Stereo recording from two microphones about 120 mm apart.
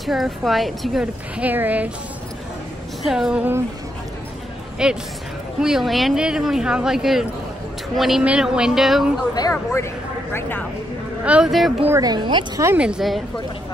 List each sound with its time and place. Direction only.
0.0 s speech: centre (ahead or behind)
1.4 s a woman's voice: 15° right (ahead or behind)
3.1 s speech: 5° right (ahead or behind)
4.8 s a woman's voice: 5° right (ahead or behind)
9.3 s speech: 30° left (ahead or behind)
11.2 s a woman's voice: 10° right (ahead or behind)
12.0 s a woman's voice: 40° right (ahead or behind)
12.7 s a woman's voice: 10° right (ahead or behind)